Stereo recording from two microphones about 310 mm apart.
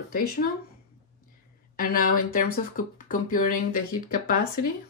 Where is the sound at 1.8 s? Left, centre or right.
Left.